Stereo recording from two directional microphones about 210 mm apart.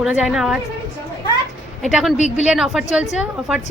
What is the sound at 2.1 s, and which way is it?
Speech, 35° left (ahead or behind).